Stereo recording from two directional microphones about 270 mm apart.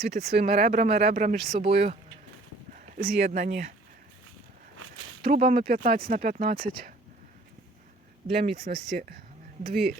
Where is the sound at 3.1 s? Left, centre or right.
Right.